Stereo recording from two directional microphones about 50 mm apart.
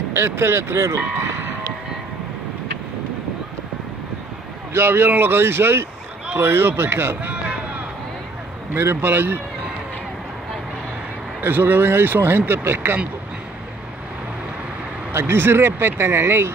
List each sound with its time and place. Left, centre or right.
0.1 s speech: right
4.7 s speech: right
8.7 s speech: right
11.4 s speech: right
15.1 s speech: right